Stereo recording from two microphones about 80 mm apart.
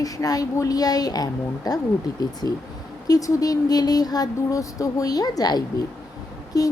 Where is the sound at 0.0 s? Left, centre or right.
Left.